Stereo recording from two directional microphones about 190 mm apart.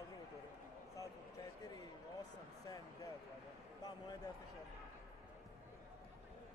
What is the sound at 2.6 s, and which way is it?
Speech, 20° left (ahead or behind).